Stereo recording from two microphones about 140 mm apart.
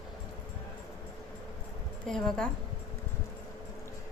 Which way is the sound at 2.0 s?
5° left (ahead or behind).